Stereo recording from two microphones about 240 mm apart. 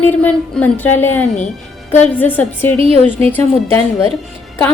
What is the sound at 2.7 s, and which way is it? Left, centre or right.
Speech, right.